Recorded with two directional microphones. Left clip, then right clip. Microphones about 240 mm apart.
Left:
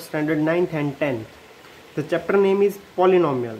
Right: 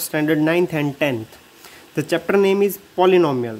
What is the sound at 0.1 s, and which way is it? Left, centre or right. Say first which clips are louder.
Speech: right 3 dB; right.